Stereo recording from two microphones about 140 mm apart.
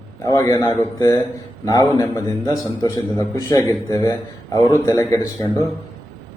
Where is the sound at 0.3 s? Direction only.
20° left (ahead or behind).